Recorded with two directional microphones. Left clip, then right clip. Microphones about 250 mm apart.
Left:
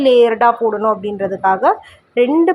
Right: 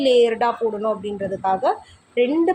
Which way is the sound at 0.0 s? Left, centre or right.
Centre.